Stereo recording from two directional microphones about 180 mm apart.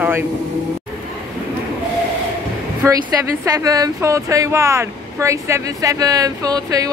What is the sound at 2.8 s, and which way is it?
Speech, 15° right (ahead or behind).